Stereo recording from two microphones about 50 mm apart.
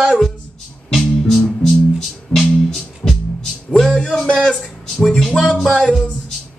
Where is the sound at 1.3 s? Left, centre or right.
Centre.